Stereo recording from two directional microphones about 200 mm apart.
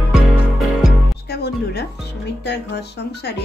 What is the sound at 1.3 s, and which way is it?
Music, 55° left (ahead or behind).